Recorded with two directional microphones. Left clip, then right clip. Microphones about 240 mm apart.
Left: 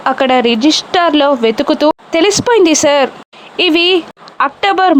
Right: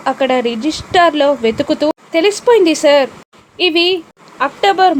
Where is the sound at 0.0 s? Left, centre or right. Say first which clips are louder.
Left 3 dB; centre.